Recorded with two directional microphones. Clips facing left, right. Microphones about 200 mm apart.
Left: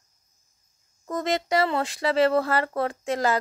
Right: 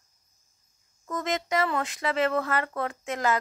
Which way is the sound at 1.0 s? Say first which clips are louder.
Left 4 dB; 35° left (ahead or behind).